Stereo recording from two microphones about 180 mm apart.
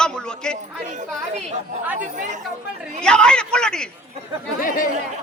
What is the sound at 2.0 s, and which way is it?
Speech, 45° right (ahead or behind).